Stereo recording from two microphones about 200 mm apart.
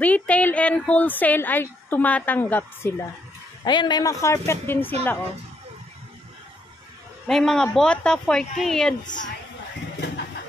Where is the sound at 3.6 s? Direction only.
20° left (ahead or behind).